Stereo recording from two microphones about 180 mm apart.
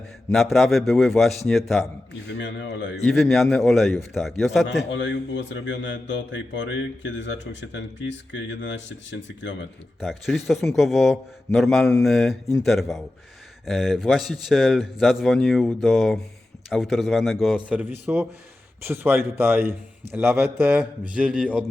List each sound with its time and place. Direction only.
0.5 s a man's voice: centre (ahead or behind)
2.2 s speech: 80° left
3.1 s a man's voice: centre (ahead or behind)
4.9 s speech: 90° left
10.0 s a man's voice: centre (ahead or behind)